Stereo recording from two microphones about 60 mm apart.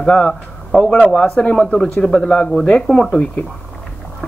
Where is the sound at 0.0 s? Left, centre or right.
Centre.